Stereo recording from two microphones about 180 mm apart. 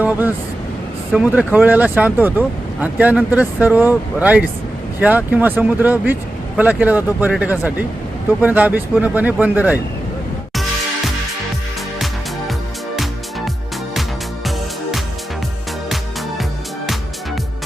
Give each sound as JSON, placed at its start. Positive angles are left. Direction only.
{"t": 0.0, "sound": "speech", "side_deg": -10}
{"t": 14.4, "sound": "music", "side_deg": 0}
{"t": 16.4, "sound": "music", "side_deg": 0}